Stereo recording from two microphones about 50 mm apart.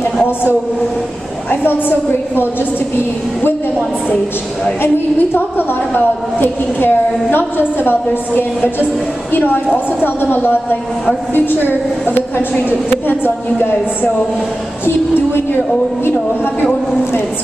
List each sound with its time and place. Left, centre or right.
1.5 s a woman's voice: left
4.8 s a woman's voice: left
10.0 s a woman's voice: left